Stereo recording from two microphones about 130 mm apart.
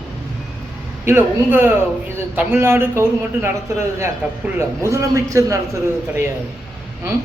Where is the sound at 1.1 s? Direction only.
15° right (ahead or behind).